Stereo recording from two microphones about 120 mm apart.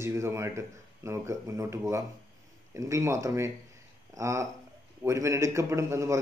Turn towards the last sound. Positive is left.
turn(degrees=-25)  # may be behind; listen again after turning